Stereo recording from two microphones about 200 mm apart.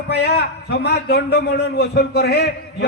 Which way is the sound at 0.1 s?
55° left (ahead or behind).